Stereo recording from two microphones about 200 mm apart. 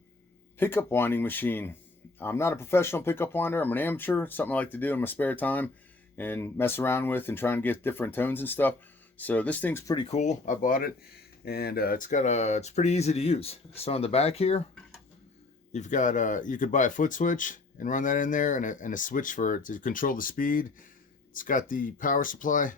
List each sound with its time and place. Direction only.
0.6 s speech: 10° left (ahead or behind); by 14.6 s 30° left (ahead or behind)
15.7 s speech: 35° left (ahead or behind)